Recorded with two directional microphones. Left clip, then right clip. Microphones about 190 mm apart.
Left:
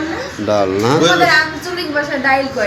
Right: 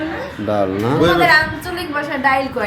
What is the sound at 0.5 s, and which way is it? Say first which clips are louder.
Speech: left 4 dB; 15° right (ahead or behind).